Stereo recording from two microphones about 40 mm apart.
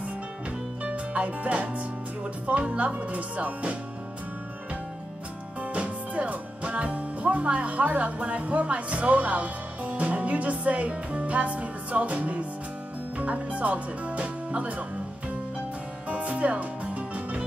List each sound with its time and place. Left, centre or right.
0.8 s speech: right
5.6 s music: right
13.2 s speech: right
16.1 s music: right